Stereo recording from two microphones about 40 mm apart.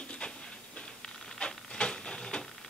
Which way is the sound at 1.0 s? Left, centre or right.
Centre.